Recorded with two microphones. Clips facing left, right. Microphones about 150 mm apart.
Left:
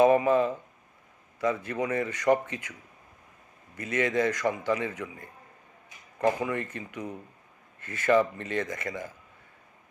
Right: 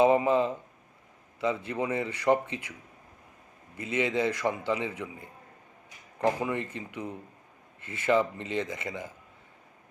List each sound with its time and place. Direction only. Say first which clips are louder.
0.0 s a man's voice: left 1 dB; 20° right (ahead or behind)
3.8 s a man's voice: left 1 dB; 20° right (ahead or behind)
6.4 s a man's voice: even; 20° right (ahead or behind)